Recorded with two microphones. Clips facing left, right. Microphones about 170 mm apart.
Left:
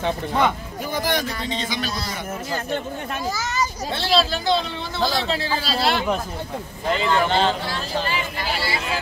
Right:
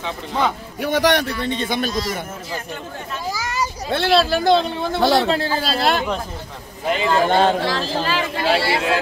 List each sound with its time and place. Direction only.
0.8 s speech: 80° right; by 2.0 s 50° right (ahead or behind)
3.9 s a man's voice: 60° right (ahead or behind)
6.9 s a man's voice: 20° right (ahead or behind)
7.2 s a man's voice: 50° right (ahead or behind)
7.6 s speech: 90° right